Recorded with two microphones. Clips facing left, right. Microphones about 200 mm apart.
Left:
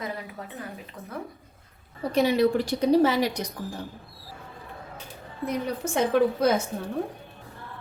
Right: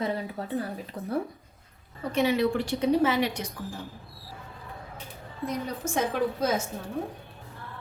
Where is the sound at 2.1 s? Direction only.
35° left (ahead or behind).